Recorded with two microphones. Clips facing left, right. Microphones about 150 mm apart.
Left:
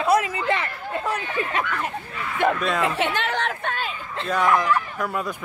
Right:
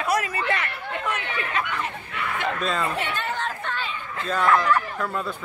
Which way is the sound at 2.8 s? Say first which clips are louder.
Left 4 dB; 80° left.